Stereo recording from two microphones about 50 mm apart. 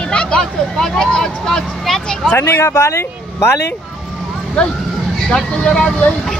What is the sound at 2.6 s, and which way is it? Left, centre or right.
Speech, left.